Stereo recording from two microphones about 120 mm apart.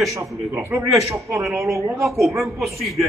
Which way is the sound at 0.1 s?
25° right (ahead or behind).